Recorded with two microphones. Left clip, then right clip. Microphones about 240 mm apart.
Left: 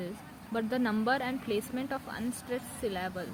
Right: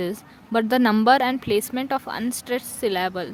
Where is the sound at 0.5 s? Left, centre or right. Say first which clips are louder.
Right 12 dB; right.